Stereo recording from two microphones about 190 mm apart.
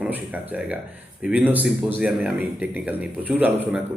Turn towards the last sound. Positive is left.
turn(degrees=-10)  # may be behind; listen again after turning